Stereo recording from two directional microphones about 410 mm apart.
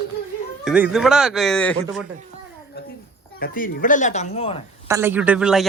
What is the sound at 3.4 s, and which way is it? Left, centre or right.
Speech, centre.